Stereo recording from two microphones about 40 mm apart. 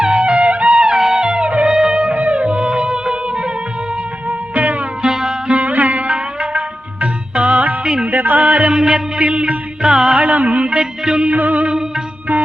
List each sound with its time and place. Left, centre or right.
0.0 s music: right
0.9 s music: centre
1.3 s music: right
2.4 s music: right
4.3 s music: right
5.0 s music: centre
5.5 s music: right
8.1 s music: right
8.7 s music: right
10.2 s a sound: right
11.3 s music: right
11.7 s music: centre